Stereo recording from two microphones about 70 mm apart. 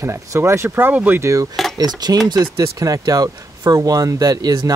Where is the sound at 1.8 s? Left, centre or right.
Right.